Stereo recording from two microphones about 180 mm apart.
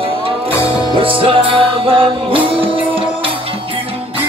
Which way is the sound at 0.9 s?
30° right (ahead or behind).